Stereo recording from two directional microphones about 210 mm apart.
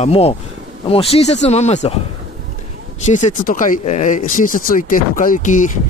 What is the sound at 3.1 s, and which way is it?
Speech, 35° left (ahead or behind).